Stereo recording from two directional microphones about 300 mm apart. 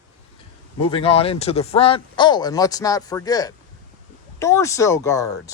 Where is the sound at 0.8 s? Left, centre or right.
Centre.